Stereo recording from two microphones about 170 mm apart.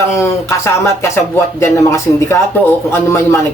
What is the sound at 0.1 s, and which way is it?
Speech, 15° left (ahead or behind).